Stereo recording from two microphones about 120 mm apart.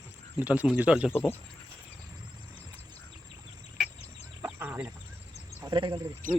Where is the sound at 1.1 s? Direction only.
15° left (ahead or behind).